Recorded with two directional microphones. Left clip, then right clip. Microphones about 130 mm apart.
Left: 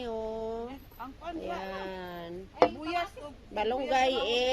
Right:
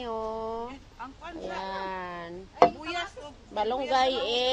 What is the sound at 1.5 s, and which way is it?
Speech, 10° left (ahead or behind).